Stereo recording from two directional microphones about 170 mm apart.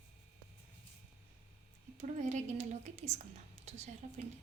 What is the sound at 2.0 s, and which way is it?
A woman's voice, 45° right (ahead or behind).